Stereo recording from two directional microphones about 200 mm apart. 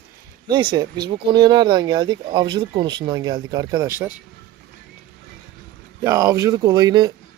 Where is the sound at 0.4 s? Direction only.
20° right (ahead or behind).